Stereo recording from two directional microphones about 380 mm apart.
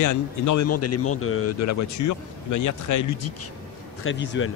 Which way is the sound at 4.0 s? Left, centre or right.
Left.